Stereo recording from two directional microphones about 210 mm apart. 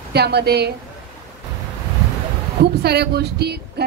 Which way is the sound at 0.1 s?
50° right (ahead or behind).